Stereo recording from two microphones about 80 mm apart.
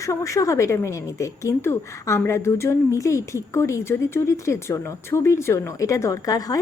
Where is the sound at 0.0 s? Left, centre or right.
Left.